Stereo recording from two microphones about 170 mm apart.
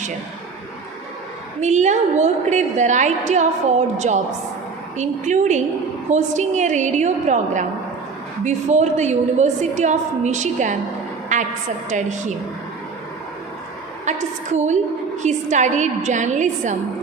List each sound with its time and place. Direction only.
1.6 s a woman's voice: 45° right (ahead or behind)
11.3 s a sound: 45° right (ahead or behind)
11.9 s a woman's voice: 45° right (ahead or behind)
14.0 s a woman's voice: 45° right (ahead or behind)